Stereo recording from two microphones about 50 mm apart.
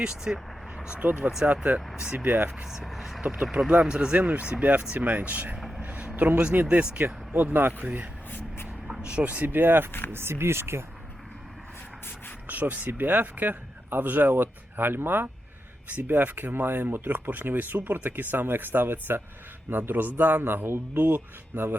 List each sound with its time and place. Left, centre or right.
0.0 s speech: centre
0.9 s speech: right
2.8 s speech: centre; by 5.5 s right
5.5 s vehicle: centre
5.8 s speech: right
7.3 s speech: right
9.0 s a sound: centre
9.2 s a man's voice: right
12.5 s a man's voice: right